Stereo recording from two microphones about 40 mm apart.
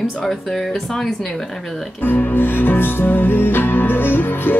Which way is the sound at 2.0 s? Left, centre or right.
Left.